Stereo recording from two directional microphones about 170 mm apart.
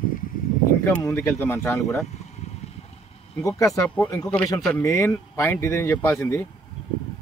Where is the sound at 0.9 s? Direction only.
10° left (ahead or behind).